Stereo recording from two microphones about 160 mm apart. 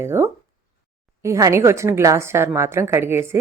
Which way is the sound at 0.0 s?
15° right (ahead or behind).